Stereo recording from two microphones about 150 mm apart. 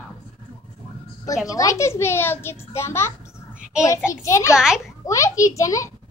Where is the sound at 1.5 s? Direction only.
20° left (ahead or behind).